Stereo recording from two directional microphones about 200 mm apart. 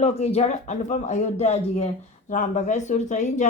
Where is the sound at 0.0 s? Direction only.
30° left (ahead or behind).